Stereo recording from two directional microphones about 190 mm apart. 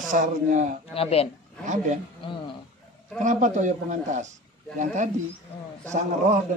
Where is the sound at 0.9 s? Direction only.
30° left (ahead or behind).